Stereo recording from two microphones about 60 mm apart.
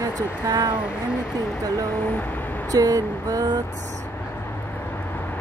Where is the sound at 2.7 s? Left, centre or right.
Right.